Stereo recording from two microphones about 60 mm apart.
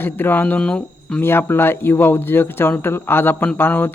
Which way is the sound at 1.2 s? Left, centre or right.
Left.